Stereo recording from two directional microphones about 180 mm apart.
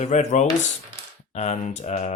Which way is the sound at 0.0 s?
40° left (ahead or behind).